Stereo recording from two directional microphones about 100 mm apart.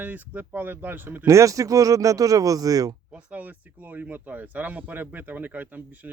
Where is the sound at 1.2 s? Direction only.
35° right (ahead or behind).